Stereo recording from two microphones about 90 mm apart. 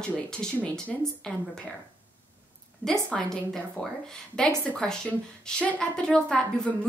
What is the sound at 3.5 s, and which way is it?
A woman's voice, 5° left (ahead or behind).